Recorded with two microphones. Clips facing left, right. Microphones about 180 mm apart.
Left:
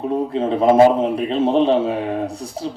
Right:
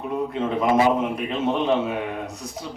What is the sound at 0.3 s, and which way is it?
A man's voice, 30° left (ahead or behind).